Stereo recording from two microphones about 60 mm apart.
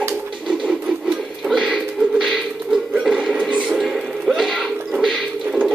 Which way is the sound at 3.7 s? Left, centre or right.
Centre.